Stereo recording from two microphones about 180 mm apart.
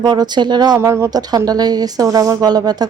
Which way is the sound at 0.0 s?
25° right (ahead or behind).